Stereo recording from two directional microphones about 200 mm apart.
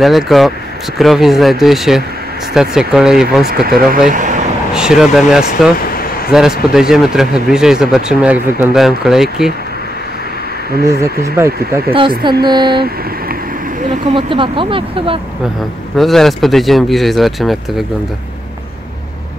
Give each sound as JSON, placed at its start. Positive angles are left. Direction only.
{"t": 0.0, "sound": "speech", "side_deg": 0}
{"t": 4.1, "sound": "speech", "side_deg": -40}
{"t": 4.7, "sound": "speech", "side_deg": 0}
{"t": 5.8, "sound": "vehicle", "side_deg": 50}
{"t": 6.7, "sound": "speech", "side_deg": -5}
{"t": 10.8, "sound": "speech", "side_deg": -50}
{"t": 11.3, "sound": "speech", "side_deg": -15}
{"t": 11.9, "sound": "speech", "side_deg": -25}
{"t": 14.1, "sound": "speech", "side_deg": -25}
{"t": 16.0, "sound": "speech", "side_deg": 0}